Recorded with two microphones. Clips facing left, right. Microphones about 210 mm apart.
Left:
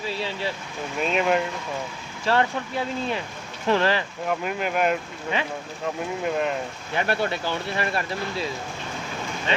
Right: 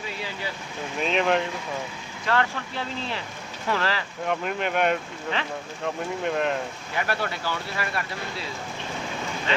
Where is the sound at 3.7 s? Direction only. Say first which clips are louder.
Left 5 dB; 20° left (ahead or behind).